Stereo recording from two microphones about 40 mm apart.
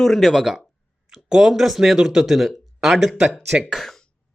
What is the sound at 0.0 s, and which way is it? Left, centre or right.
Speech, centre.